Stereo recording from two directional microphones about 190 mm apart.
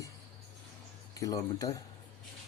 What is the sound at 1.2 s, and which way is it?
Speech, 20° left (ahead or behind).